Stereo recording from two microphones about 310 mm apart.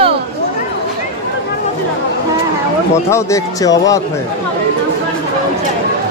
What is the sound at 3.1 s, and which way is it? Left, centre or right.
Speech, centre.